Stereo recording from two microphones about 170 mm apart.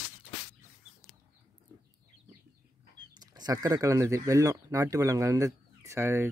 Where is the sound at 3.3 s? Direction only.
20° right (ahead or behind).